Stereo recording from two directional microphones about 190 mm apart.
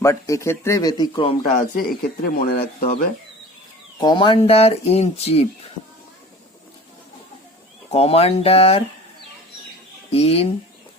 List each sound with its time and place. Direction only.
0.0 s speech: 15° left (ahead or behind)
1.5 s speech: 50° left (ahead or behind)
4.0 s speech: 25° left (ahead or behind)
7.9 s speech: 30° left (ahead or behind)
10.1 s speech: 30° left (ahead or behind)